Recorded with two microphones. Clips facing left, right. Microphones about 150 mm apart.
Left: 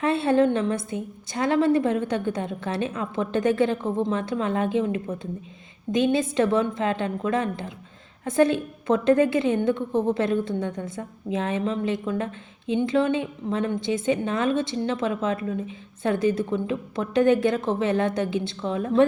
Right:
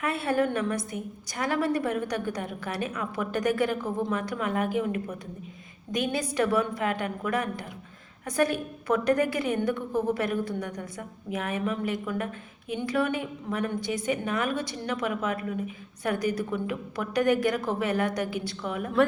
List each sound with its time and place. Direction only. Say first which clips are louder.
0.0 s a woman's voice: left 6 dB; 25° left (ahead or behind)